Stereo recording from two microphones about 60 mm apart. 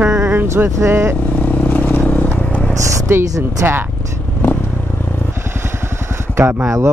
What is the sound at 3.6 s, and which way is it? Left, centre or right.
Speech, right.